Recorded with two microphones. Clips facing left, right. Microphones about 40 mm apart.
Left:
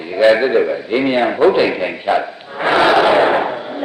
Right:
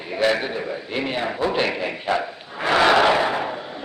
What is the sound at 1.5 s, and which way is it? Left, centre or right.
A man's voice, centre.